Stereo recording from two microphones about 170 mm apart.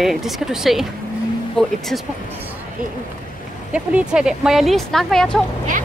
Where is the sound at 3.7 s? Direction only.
5° right (ahead or behind).